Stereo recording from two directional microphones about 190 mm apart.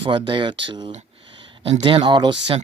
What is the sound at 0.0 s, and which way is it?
Speech, 25° right (ahead or behind).